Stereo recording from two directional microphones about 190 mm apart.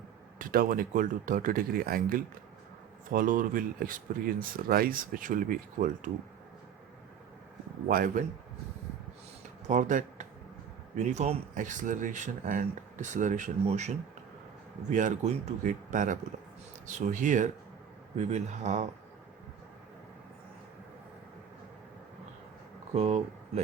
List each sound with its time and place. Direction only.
0.3 s speech: 45° right (ahead or behind)
7.9 s speech: 45° right (ahead or behind)
9.6 s speech: 40° right (ahead or behind)
23.0 s speech: 35° right (ahead or behind)